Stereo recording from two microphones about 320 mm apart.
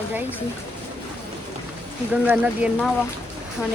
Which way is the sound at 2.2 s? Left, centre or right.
Centre.